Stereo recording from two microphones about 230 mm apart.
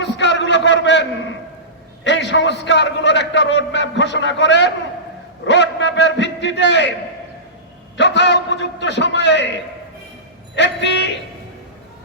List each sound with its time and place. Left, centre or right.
0.0 s a sound: left
2.0 s a man's voice: left
7.9 s a man's voice: left